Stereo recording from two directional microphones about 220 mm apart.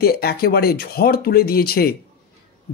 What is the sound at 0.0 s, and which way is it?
Speech, 45° left (ahead or behind).